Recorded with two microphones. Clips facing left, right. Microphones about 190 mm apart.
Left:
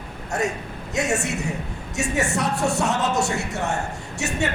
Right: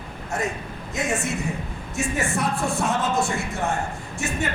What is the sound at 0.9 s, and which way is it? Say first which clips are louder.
Speech: left 2 dB; 70° left (ahead or behind).